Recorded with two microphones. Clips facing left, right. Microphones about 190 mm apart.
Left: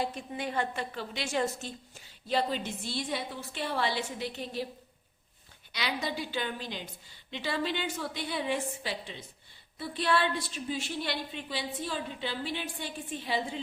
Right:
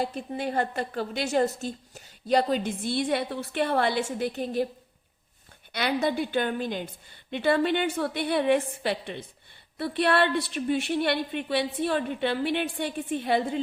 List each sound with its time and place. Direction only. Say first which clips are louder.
0.0 s a woman's voice: right 4 dB; 35° right (ahead or behind)
5.7 s a woman's voice: right 8 dB; 55° right (ahead or behind)